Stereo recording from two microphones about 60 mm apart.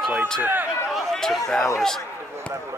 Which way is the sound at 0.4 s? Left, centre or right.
Right.